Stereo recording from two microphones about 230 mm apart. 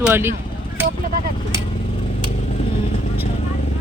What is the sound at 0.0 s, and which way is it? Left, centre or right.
Speech, centre.